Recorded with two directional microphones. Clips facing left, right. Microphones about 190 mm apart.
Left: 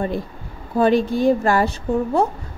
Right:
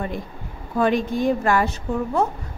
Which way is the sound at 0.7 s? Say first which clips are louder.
Left 4 dB; 30° left (ahead or behind).